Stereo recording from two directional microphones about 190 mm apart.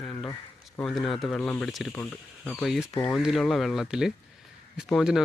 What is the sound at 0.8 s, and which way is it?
Speech, centre (ahead or behind).